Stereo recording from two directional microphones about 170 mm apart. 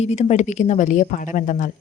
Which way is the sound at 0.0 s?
40° left (ahead or behind).